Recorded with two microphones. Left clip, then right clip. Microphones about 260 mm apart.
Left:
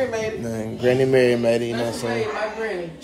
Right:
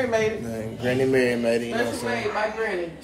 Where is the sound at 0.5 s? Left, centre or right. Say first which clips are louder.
Left 6 dB; left.